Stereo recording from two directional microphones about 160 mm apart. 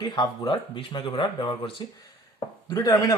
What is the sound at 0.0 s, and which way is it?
Speech, 30° left (ahead or behind).